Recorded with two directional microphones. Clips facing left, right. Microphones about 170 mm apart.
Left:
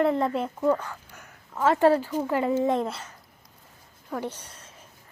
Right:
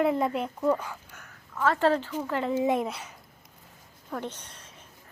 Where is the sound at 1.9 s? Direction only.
10° left (ahead or behind).